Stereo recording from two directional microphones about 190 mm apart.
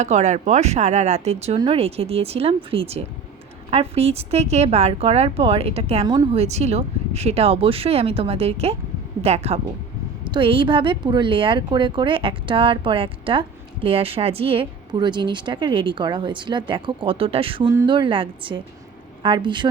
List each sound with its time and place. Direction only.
0.0 s speech: 40° right (ahead or behind)
6.1 s a woman's voice: 20° right (ahead or behind)
6.4 s a woman's voice: 35° right (ahead or behind)